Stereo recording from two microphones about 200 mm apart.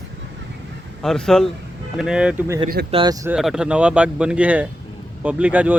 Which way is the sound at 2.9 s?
20° right (ahead or behind).